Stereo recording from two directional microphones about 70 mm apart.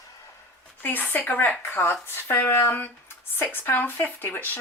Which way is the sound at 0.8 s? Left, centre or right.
Left.